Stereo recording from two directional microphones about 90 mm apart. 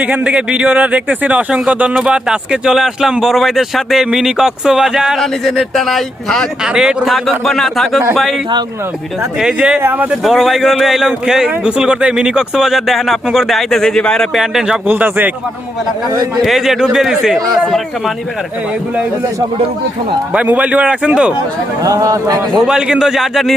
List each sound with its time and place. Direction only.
0.0 s speech: 15° right (ahead or behind)
9.4 s a man's voice: 10° right (ahead or behind)
10.1 s speech: 5° right (ahead or behind)
14.8 s a man's voice: 20° right (ahead or behind)
16.4 s speech: centre (ahead or behind)
20.3 s speech: 15° right (ahead or behind)
21.8 s a man's voice: 40° right (ahead or behind)
22.6 s speech: 5° right (ahead or behind)